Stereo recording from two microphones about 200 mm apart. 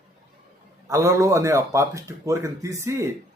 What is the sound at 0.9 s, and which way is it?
Speech, 15° right (ahead or behind).